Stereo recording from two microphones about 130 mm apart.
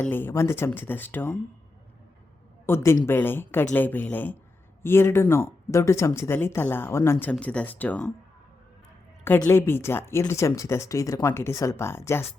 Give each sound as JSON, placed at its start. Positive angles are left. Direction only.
{"t": 0.0, "sound": "speech", "side_deg": 15}
{"t": 2.6, "sound": "speech", "side_deg": 20}
{"t": 9.2, "sound": "speech", "side_deg": 15}